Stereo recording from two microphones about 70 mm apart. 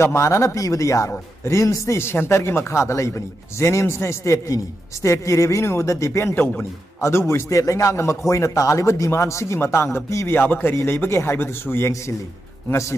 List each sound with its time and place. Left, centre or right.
0.0 s a man's voice: left